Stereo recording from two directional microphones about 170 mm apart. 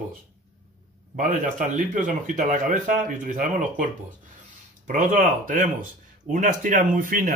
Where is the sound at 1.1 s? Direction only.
50° right (ahead or behind).